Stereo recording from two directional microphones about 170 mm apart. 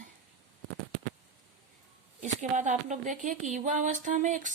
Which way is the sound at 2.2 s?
45° right (ahead or behind).